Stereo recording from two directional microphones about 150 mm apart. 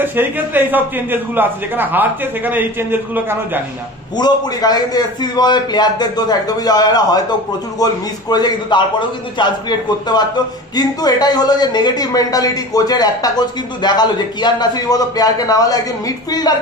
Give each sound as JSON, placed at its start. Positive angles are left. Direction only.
{"t": 0.0, "sound": "a man's voice", "side_deg": -15}
{"t": 4.2, "sound": "a man's voice", "side_deg": 25}